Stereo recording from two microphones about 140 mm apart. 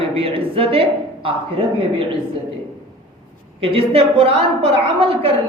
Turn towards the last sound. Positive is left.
turn(degrees=-45)  # may be behind; listen again after turning